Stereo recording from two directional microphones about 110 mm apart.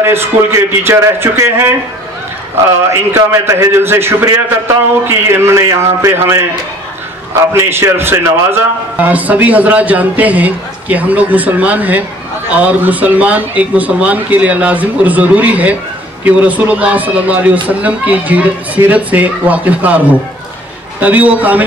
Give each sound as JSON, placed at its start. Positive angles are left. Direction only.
{"t": 0.0, "sound": "a man's voice", "side_deg": -20}
{"t": 2.9, "sound": "a man's voice", "side_deg": -20}
{"t": 7.5, "sound": "a man's voice", "side_deg": -20}